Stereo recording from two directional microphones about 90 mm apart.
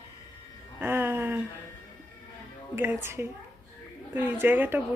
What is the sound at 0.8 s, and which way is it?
Speech, 25° right (ahead or behind).